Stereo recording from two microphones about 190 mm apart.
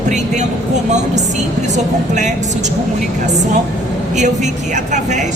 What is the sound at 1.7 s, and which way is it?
Speech, 40° right (ahead or behind).